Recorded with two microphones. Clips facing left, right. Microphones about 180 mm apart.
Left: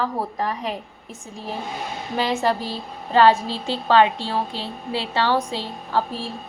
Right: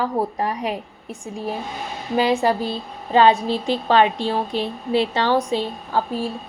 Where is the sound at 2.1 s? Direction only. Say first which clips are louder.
Right 4 dB; 10° right (ahead or behind).